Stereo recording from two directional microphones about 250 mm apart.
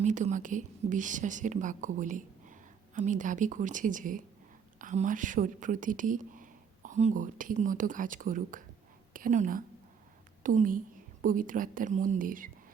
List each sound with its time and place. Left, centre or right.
0.0 s a woman's voice: right